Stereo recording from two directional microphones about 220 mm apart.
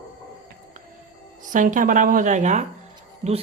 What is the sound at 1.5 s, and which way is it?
Speech, 35° right (ahead or behind).